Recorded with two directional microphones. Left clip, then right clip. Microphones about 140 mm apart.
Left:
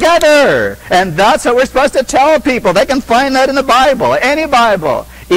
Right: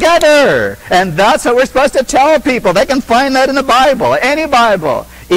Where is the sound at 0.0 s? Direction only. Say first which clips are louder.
Even; 15° left (ahead or behind).